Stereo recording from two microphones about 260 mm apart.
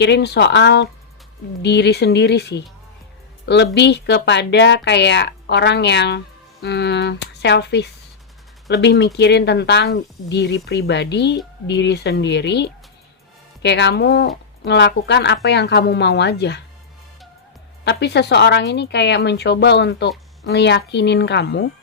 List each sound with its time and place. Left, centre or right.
0.0 s speech: left
17.8 s speech: left